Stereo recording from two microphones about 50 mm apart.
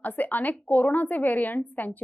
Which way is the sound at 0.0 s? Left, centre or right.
Left.